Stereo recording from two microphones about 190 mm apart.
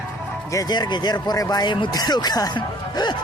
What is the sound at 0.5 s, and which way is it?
Speech, 20° left (ahead or behind).